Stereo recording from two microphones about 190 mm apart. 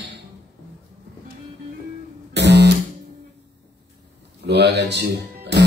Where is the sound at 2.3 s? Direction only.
65° right (ahead or behind).